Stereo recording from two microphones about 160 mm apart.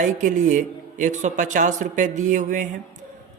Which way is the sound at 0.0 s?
50° right (ahead or behind).